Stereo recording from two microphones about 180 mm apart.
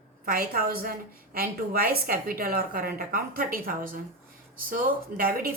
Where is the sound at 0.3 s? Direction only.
55° right (ahead or behind).